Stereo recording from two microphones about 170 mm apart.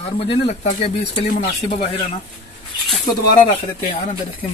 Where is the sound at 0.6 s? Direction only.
50° left (ahead or behind).